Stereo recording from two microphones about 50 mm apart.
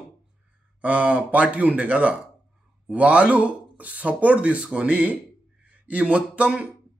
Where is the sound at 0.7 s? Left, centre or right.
Right.